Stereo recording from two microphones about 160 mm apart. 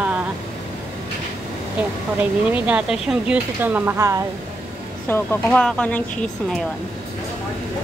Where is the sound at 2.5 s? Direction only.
10° right (ahead or behind).